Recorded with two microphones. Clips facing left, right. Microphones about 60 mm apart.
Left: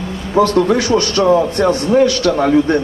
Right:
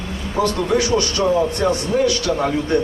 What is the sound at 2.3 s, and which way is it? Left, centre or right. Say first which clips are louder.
Speech: left 6 dB; left.